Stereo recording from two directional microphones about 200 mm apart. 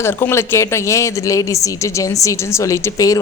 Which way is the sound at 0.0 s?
10° left (ahead or behind).